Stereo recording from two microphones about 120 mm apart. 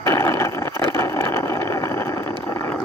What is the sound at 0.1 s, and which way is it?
Vehicle, 20° left (ahead or behind).